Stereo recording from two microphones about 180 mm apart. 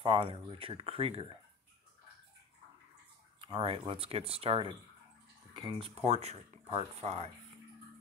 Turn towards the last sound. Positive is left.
turn(degrees=-35)  # may be behind; listen again after turning